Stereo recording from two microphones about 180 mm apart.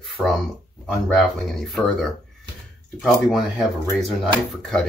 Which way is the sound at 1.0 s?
Centre (ahead or behind).